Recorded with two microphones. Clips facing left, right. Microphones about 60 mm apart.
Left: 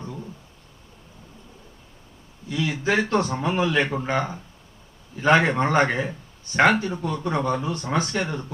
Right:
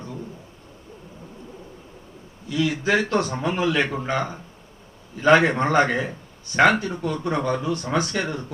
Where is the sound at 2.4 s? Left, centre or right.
Left.